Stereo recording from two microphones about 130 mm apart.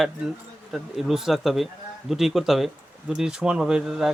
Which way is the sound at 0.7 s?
Centre (ahead or behind).